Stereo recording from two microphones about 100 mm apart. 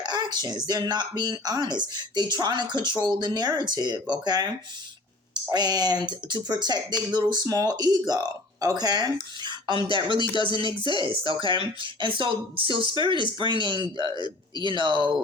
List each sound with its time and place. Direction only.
0.0 s speech: 45° right (ahead or behind)
5.3 s speech: 45° right (ahead or behind)
9.4 s a sound: 50° right (ahead or behind)
9.8 s speech: 55° right (ahead or behind)